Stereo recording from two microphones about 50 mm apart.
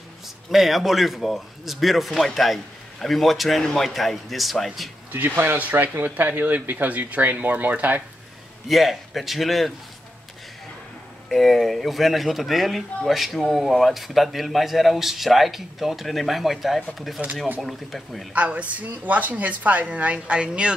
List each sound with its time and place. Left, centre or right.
0.5 s speech: centre
5.1 s speech: right
6.9 s speech: right
8.6 s speech: centre
11.2 s speech: centre
17.2 s a woman's voice: right
17.6 s speech: centre
18.3 s a woman's voice: right